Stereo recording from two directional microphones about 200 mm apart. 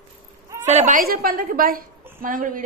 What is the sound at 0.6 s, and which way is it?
A woman's voice, 40° right (ahead or behind).